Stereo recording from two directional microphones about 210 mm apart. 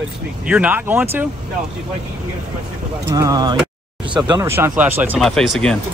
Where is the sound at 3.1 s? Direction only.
15° right (ahead or behind); by 5.8 s centre (ahead or behind).